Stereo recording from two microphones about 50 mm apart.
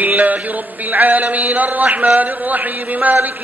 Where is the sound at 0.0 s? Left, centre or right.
Right.